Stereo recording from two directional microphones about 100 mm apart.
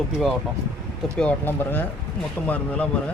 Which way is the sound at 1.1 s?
15° left (ahead or behind).